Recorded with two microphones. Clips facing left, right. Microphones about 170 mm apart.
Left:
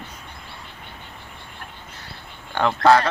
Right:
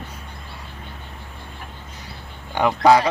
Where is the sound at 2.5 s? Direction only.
15° right (ahead or behind).